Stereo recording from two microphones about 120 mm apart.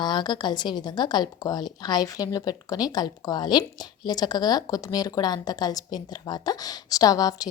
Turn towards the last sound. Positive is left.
turn(degrees=30)  # may be behind; listen again after turning